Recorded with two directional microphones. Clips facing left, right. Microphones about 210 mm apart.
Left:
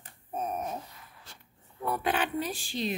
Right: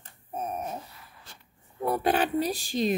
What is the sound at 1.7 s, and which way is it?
Speech, 35° right (ahead or behind).